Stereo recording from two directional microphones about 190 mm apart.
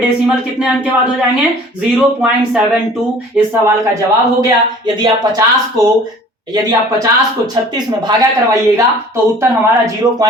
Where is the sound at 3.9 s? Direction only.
20° right (ahead or behind).